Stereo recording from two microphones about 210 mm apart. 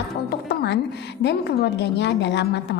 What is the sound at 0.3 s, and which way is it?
Music, 55° left (ahead or behind).